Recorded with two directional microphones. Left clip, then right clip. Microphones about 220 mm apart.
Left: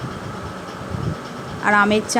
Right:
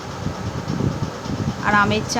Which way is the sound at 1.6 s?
15° left (ahead or behind).